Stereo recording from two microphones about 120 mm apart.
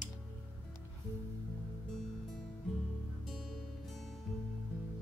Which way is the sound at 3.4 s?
Centre (ahead or behind).